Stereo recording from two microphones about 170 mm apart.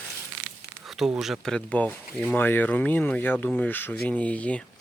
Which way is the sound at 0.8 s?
Centre (ahead or behind).